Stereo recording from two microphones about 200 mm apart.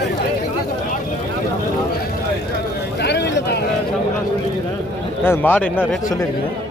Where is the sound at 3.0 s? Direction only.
60° left (ahead or behind).